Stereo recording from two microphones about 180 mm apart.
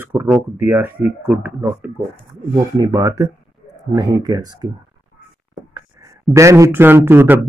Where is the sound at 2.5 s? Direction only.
20° right (ahead or behind).